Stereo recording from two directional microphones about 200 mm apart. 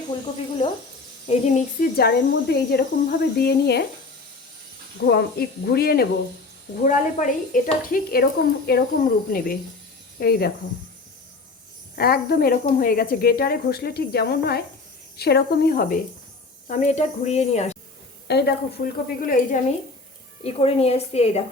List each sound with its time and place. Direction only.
0.6 s speech: 25° left (ahead or behind)
1.3 s speech: 35° left (ahead or behind)
2.0 s speech: 55° left (ahead or behind)
5.0 s speech: 50° left (ahead or behind)
11.9 s speech: 50° left (ahead or behind); by 17.7 s 35° left (ahead or behind)
18.3 s speech: 55° left (ahead or behind)
20.4 s speech: 30° left (ahead or behind)